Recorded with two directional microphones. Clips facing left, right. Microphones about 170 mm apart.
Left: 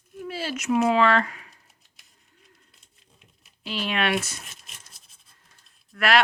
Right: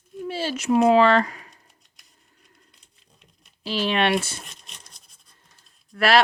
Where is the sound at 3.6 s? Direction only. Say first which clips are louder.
Right 5 dB; 35° right (ahead or behind).